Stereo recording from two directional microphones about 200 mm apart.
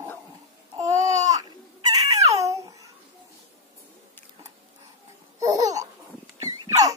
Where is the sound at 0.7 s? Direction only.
15° right (ahead or behind).